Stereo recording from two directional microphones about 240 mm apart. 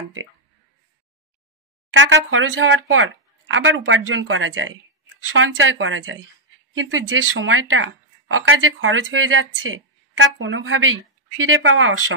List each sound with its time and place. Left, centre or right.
1.9 s a woman's voice: right